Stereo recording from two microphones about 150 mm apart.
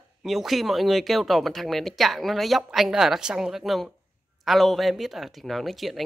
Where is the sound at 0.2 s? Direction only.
Centre (ahead or behind).